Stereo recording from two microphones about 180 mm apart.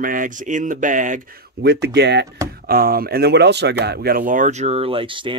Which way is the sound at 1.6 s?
65° right (ahead or behind).